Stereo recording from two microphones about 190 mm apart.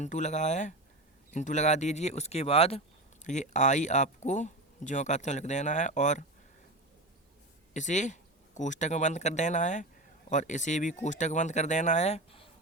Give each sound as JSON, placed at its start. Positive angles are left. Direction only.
{"t": 0.0, "sound": "speech", "side_deg": 40}
{"t": 7.7, "sound": "speech", "side_deg": 40}